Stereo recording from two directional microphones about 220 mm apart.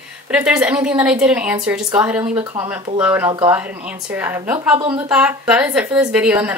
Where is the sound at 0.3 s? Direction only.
5° right (ahead or behind).